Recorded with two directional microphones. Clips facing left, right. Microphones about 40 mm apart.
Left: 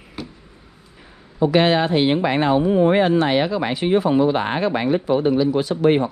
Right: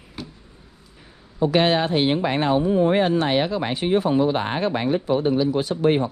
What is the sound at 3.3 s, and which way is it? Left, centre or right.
Speech, left.